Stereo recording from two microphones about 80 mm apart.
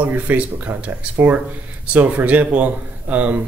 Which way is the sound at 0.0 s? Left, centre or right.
Right.